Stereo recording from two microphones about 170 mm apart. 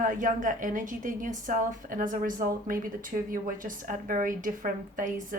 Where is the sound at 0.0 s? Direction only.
50° right (ahead or behind).